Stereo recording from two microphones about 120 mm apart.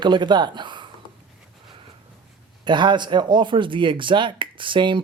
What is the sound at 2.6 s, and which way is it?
A man's voice, 40° right (ahead or behind).